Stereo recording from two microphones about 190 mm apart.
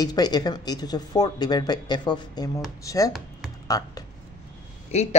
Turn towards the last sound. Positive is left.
turn(degrees=35)  # may be behind; listen again after turning